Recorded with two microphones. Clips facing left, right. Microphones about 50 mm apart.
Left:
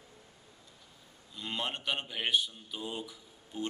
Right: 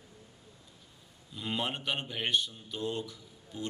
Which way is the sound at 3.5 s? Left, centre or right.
Left.